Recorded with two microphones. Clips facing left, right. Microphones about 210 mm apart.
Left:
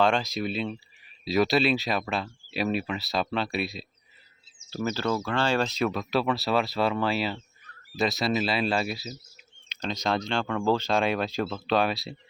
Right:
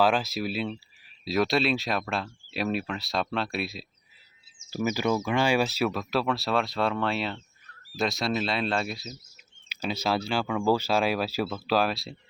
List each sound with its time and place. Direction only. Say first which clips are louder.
0.0 s speech: even; 5° right (ahead or behind)
9.6 s speech: even; 5° right (ahead or behind)